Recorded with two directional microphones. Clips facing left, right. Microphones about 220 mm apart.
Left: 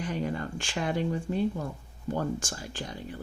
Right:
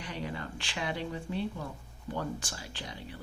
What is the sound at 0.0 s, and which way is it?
Speech, 45° left (ahead or behind).